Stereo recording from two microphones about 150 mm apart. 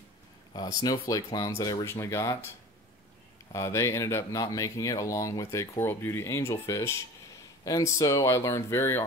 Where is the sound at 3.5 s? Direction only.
20° left (ahead or behind).